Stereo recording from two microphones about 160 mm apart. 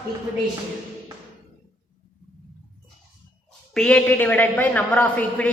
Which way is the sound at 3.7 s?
5° left (ahead or behind).